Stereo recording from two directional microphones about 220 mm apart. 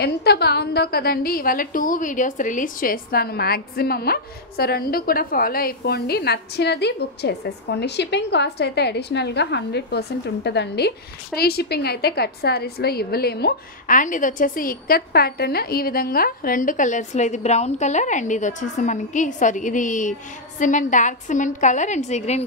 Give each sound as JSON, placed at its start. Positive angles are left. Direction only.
{"t": 0.0, "sound": "a woman's voice", "side_deg": 45}